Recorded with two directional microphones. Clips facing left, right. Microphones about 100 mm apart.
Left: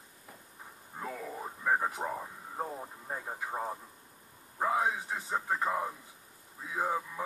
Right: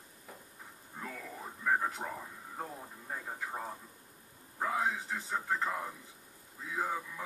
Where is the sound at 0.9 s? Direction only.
20° left (ahead or behind).